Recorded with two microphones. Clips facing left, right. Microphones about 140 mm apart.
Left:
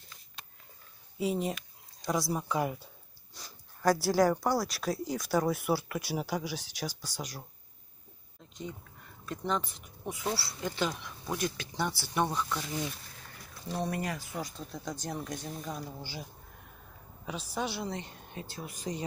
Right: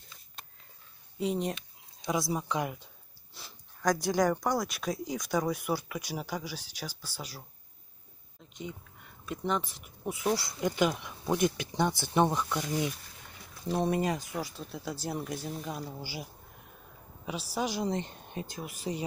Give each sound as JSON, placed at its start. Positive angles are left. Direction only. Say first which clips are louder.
{"t": 1.1, "sound": "speech", "louder": "even", "side_deg": 5}
{"t": 9.2, "sound": "speech", "louder": "right 1 dB", "side_deg": -5}
{"t": 17.6, "sound": "speech", "louder": "right 4 dB", "side_deg": -15}